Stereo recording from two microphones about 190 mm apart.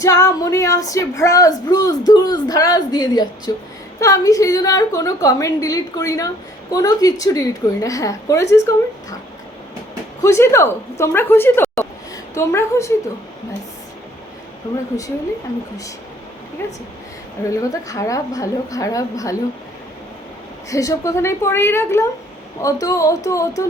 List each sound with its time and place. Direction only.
0.0 s a woman's voice: 15° left (ahead or behind)
10.2 s a woman's voice: 15° left (ahead or behind)
17.5 s a woman's voice: 15° left (ahead or behind)
20.7 s a woman's voice: 15° left (ahead or behind)